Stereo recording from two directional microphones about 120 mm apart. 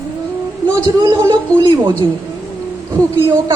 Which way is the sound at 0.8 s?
40° right (ahead or behind).